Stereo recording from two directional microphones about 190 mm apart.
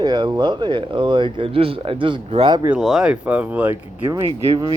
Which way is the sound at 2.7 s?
5° right (ahead or behind).